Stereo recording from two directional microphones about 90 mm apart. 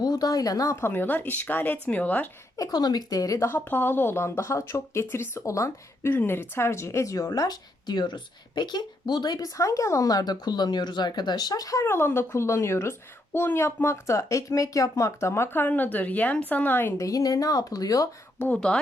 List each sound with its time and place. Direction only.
0.0 s speech: 45° left (ahead or behind)
0.8 s a woman's voice: 25° left (ahead or behind)
2.6 s speech: 50° left (ahead or behind)
3.3 s speech: 30° left (ahead or behind)
17.0 s speech: 40° left (ahead or behind)
18.3 s a woman's voice: 15° left (ahead or behind)